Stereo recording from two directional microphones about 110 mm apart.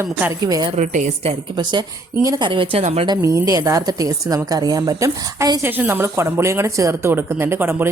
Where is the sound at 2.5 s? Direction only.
55° right (ahead or behind).